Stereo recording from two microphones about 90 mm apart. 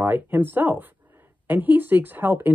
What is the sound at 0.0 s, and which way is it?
Speech, 25° right (ahead or behind).